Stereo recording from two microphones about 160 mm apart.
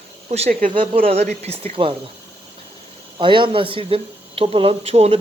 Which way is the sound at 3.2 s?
30° right (ahead or behind).